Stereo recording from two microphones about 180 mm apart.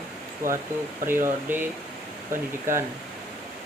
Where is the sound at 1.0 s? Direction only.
10° right (ahead or behind).